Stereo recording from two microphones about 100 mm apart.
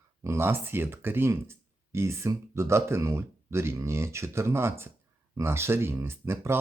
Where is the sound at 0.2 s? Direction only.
25° right (ahead or behind).